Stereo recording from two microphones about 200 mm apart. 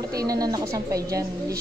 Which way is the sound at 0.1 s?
20° right (ahead or behind).